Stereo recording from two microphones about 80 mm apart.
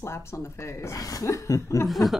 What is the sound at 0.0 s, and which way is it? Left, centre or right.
Speech, left.